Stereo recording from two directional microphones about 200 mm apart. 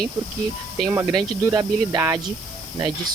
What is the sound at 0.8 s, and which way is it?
Speech, 15° right (ahead or behind).